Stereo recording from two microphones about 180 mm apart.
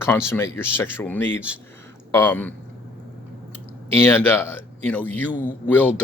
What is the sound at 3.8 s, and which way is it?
Speech, 10° left (ahead or behind).